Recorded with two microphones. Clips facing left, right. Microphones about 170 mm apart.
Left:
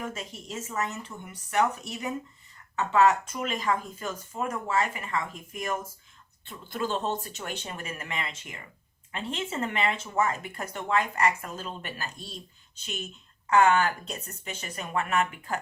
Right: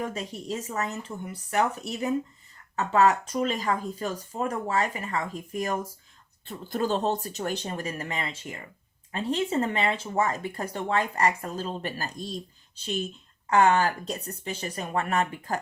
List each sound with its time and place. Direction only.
0.0 s speech: 35° right (ahead or behind)